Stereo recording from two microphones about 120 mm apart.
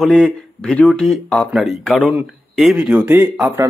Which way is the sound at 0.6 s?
5° left (ahead or behind).